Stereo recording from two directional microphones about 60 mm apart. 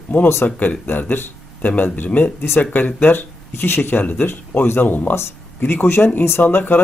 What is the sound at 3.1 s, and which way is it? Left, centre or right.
Speech, left.